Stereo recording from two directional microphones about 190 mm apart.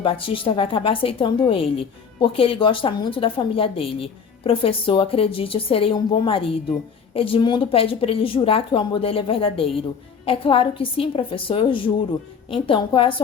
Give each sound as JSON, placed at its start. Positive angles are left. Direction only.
{"t": 0.0, "sound": "a woman's voice", "side_deg": 30}